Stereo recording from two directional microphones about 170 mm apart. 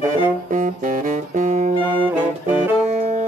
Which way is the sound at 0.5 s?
50° right (ahead or behind).